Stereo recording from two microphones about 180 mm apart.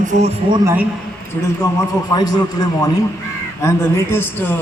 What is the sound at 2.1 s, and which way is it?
A man's voice, 20° left (ahead or behind).